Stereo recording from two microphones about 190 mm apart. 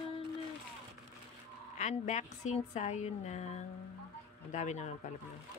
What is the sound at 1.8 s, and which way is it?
A woman's voice, 40° left (ahead or behind).